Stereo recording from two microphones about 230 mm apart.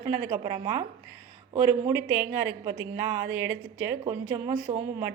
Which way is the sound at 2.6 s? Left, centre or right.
Centre.